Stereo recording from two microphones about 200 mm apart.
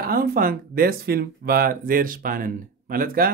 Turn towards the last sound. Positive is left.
turn(degrees=-45)  # may be behind; listen again after turning